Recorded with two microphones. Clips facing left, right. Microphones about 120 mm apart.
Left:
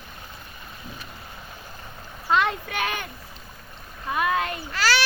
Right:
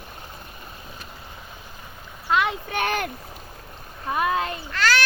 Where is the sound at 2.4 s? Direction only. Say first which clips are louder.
Even; 15° right (ahead or behind).